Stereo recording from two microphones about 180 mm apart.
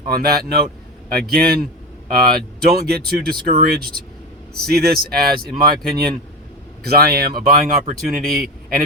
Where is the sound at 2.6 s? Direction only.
60° right (ahead or behind).